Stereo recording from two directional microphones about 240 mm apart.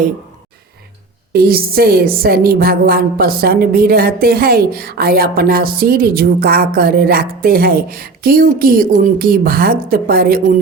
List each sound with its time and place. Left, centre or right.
1.3 s a woman's voice: right